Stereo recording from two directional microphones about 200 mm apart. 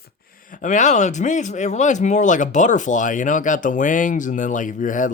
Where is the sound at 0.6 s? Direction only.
40° left (ahead or behind).